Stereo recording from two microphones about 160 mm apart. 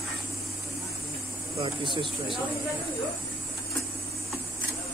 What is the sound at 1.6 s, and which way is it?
Speech, 30° right (ahead or behind).